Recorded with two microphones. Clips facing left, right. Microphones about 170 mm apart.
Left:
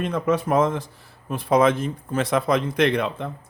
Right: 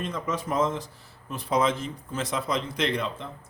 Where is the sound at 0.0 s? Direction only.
60° left (ahead or behind).